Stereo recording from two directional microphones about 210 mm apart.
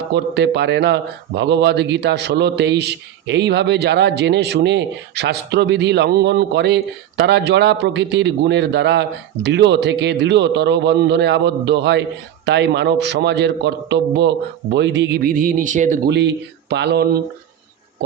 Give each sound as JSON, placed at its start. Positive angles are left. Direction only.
{"t": 0.1, "sound": "a man's voice", "side_deg": -55}
{"t": 16.0, "sound": "a man's voice", "side_deg": -55}